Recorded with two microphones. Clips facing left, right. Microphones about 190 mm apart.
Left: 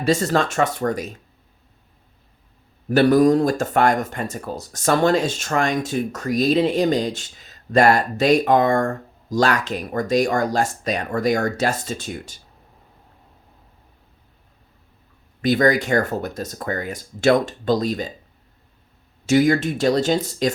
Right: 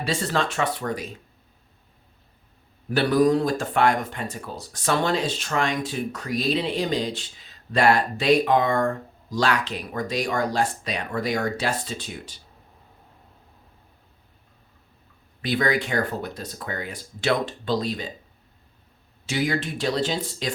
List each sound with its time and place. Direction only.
0.0 s speech: 45° left (ahead or behind)
2.9 s speech: 45° left (ahead or behind)
15.4 s speech: 45° left (ahead or behind)
19.2 s speech: 45° left (ahead or behind)